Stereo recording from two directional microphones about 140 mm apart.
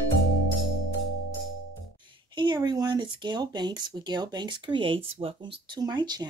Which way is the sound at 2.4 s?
30° right (ahead or behind).